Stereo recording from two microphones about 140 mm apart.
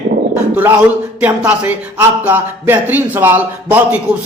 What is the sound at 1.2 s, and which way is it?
A man's voice, 10° right (ahead or behind).